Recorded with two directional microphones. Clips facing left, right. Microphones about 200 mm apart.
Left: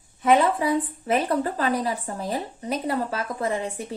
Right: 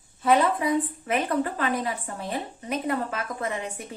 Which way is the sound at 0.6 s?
30° left (ahead or behind).